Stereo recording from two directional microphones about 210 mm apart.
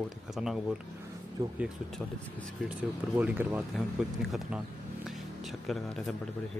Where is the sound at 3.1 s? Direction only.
10° right (ahead or behind).